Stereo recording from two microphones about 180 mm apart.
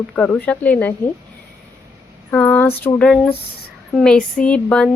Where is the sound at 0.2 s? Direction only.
10° left (ahead or behind).